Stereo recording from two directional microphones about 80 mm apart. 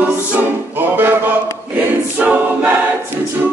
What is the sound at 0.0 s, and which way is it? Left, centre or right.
Music, centre.